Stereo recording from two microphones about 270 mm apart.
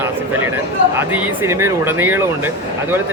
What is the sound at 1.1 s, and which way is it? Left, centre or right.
Speech, centre.